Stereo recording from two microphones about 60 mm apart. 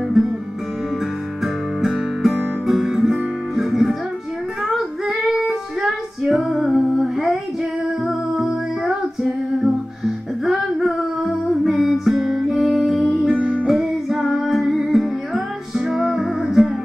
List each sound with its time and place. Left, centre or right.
0.2 s guitar: centre
1.4 s music: centre
4.6 s child singing: centre
8.0 s music: centre
10.5 s music: centre
13.3 s music: centre
13.7 s music: centre